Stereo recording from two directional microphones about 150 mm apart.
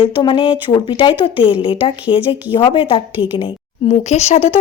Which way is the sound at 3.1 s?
10° right (ahead or behind).